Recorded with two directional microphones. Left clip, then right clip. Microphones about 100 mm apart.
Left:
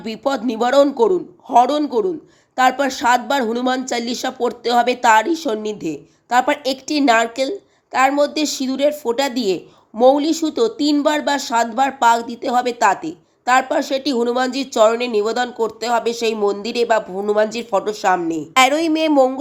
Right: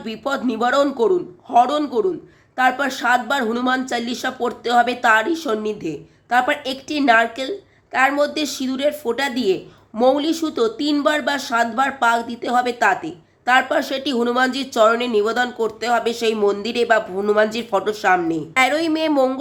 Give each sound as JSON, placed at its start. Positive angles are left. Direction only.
{"t": 0.0, "sound": "speech", "side_deg": 40}
{"t": 2.6, "sound": "speech", "side_deg": 50}
{"t": 2.8, "sound": "speech", "side_deg": 35}